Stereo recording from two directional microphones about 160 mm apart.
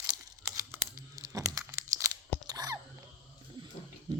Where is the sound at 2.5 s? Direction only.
20° right (ahead or behind).